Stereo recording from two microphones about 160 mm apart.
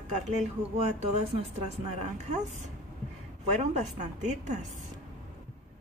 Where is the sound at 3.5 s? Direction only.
45° right (ahead or behind).